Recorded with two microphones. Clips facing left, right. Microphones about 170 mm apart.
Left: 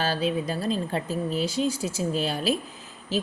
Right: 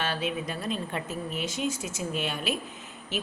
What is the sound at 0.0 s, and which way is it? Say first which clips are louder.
A woman's voice: left 5 dB; 35° left (ahead or behind).